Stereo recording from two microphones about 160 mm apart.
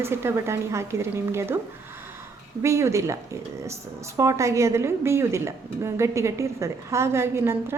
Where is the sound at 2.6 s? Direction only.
20° right (ahead or behind).